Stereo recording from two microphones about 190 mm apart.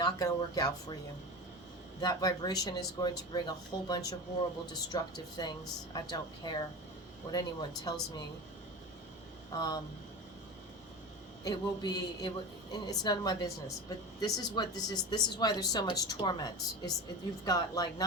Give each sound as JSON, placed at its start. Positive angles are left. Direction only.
{"t": 0.0, "sound": "speech", "side_deg": 20}
{"t": 2.0, "sound": "speech", "side_deg": 20}
{"t": 9.6, "sound": "speech", "side_deg": 20}
{"t": 11.4, "sound": "speech", "side_deg": 20}